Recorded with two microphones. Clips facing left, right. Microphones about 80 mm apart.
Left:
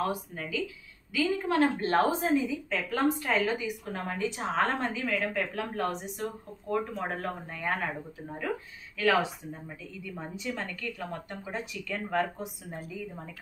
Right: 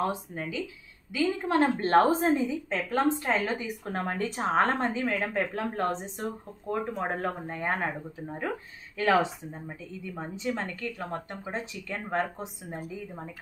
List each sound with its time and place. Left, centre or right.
0.3 s a woman's voice: right